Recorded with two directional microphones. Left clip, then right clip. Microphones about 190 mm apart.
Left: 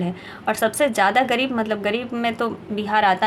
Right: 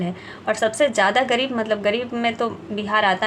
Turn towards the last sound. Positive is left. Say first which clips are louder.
# left 1 dB
turn(degrees=20)  # may be behind; listen again after turning